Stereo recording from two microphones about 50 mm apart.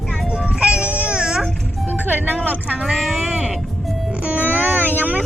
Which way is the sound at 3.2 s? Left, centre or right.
Right.